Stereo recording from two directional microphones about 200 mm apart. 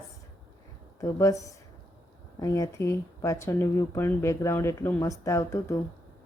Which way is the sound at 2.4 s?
15° left (ahead or behind).